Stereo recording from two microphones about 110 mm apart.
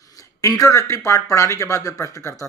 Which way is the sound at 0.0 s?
30° left (ahead or behind).